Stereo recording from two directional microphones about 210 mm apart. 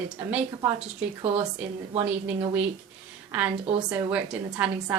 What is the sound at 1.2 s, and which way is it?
Speech, 25° right (ahead or behind).